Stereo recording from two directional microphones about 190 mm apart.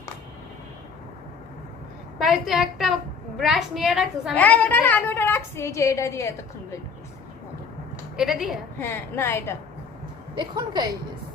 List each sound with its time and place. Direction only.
2.1 s a woman's voice: centre (ahead or behind); by 6.7 s 15° left (ahead or behind)
8.1 s a woman's voice: centre (ahead or behind)
8.8 s a woman's voice: 10° left (ahead or behind)
10.3 s a woman's voice: 20° right (ahead or behind)